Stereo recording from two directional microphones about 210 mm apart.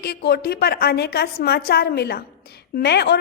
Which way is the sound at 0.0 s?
50° left (ahead or behind).